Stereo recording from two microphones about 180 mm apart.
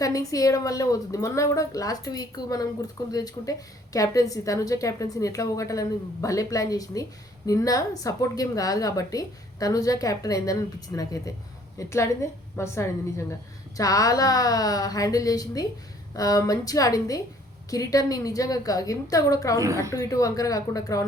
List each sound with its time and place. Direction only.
0.0 s a woman's voice: 20° left (ahead or behind)